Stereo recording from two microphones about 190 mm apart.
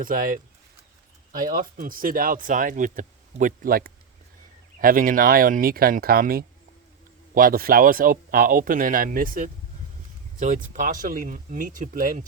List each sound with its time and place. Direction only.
0.0 s speech: 45° right (ahead or behind)